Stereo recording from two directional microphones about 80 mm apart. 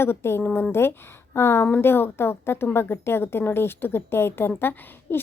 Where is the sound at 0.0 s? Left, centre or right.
Left.